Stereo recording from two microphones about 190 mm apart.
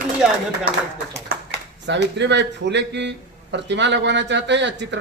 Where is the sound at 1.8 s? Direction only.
65° right (ahead or behind).